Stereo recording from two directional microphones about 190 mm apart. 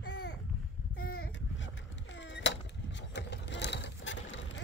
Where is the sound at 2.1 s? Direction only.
70° left (ahead or behind).